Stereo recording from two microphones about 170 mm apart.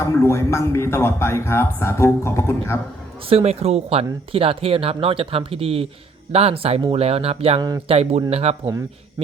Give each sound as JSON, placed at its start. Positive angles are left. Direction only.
{"t": 0.0, "sound": "a man's voice", "side_deg": 15}
{"t": 3.2, "sound": "speech", "side_deg": -40}